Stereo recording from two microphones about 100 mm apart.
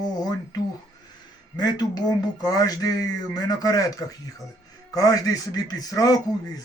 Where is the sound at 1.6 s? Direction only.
40° left (ahead or behind).